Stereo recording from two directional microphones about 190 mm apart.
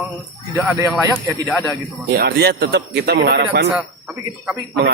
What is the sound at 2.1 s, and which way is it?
A man's voice, 55° right (ahead or behind).